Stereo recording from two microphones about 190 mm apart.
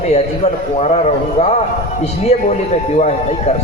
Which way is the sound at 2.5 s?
35° left (ahead or behind).